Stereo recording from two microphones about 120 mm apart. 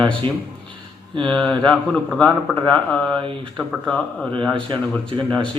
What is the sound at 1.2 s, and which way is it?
A man's voice, 5° left (ahead or behind).